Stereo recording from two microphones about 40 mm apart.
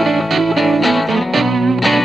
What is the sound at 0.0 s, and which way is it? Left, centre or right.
Music, centre.